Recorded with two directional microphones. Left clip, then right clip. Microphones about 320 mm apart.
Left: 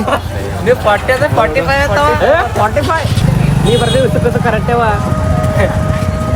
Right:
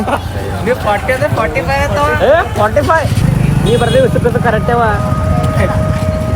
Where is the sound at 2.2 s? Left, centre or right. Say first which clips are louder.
Right 1 dB; centre.